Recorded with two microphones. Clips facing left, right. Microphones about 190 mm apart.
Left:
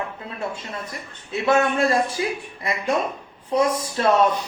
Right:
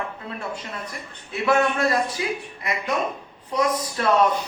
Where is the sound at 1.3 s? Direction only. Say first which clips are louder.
Left 1 dB; 25° left (ahead or behind).